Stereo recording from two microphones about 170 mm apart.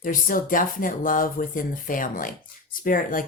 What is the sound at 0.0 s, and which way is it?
Speech, 55° left (ahead or behind).